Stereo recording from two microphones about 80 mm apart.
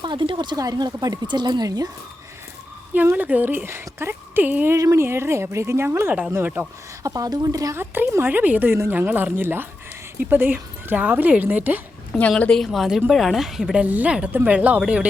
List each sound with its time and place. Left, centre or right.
0.0 s speech: right
0.6 s speech: right
2.9 s a woman's voice: right
4.8 s speech: right
5.0 s a woman's voice: right
7.0 s speech: right
7.8 s a woman's voice: right
12.4 s speech: centre
13.8 s a woman's voice: centre